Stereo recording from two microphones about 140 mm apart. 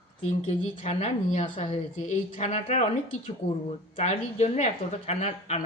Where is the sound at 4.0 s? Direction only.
55° left (ahead or behind).